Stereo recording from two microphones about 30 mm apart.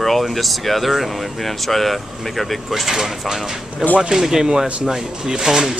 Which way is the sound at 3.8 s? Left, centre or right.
Right.